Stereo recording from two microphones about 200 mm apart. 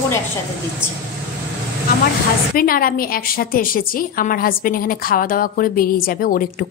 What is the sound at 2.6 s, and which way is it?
A woman's voice, 45° left (ahead or behind).